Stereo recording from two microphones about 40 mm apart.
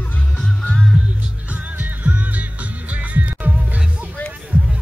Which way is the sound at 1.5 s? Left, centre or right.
Right.